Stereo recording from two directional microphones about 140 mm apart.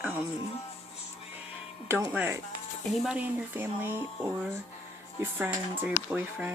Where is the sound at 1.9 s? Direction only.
15° right (ahead or behind).